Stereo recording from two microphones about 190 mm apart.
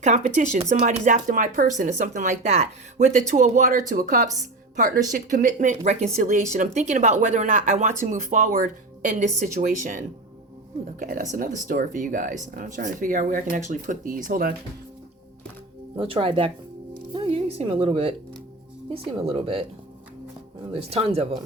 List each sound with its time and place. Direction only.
0.0 s speech: 35° right (ahead or behind)
11.0 s speech: 45° right (ahead or behind)
16.0 s a woman's voice: 30° right (ahead or behind)
20.9 s speech: 30° right (ahead or behind)